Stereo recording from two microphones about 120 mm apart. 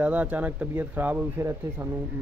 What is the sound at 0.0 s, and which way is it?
Speech, 10° right (ahead or behind).